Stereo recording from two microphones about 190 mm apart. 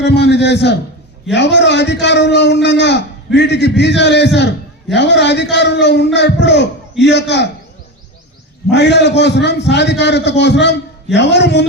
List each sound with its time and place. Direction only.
0.0 s a man's voice: 60° left (ahead or behind)
8.7 s a man's voice: 65° left (ahead or behind)